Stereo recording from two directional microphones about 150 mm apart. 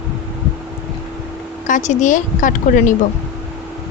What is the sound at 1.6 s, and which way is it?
Speech, 55° left (ahead or behind).